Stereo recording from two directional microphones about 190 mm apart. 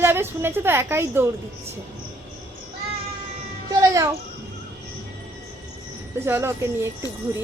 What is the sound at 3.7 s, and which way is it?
Music, 15° right (ahead or behind).